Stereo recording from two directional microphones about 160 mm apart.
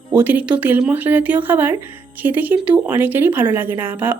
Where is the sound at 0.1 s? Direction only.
10° right (ahead or behind).